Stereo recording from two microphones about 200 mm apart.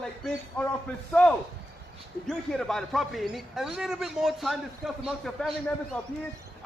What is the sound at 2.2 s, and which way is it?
A man's voice, centre (ahead or behind).